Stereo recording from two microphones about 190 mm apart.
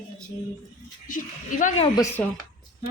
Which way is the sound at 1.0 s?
45° left (ahead or behind).